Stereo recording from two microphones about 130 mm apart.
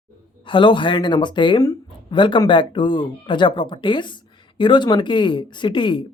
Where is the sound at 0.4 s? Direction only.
40° left (ahead or behind).